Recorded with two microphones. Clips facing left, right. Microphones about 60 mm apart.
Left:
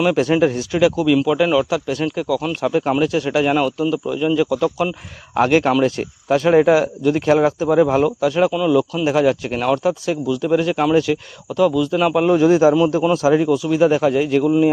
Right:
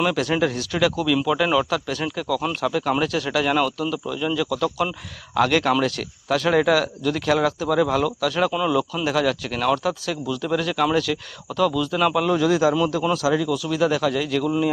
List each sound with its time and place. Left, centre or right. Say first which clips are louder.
0.1 s speech: left 6 dB; left
8.5 s speech: left 5 dB; centre
9.0 s speech: left 5 dB; left
12.2 s speech: left 9 dB; left
13.7 s speech: left 5 dB; left